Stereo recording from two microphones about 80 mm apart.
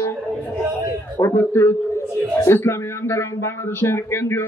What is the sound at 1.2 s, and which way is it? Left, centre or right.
A man's voice, left.